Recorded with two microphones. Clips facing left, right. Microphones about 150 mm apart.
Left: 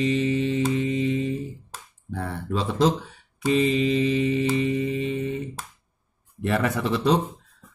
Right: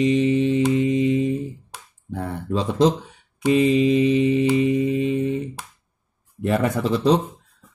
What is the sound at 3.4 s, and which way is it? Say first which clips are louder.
Mantra: right 4 dB; 15° right (ahead or behind).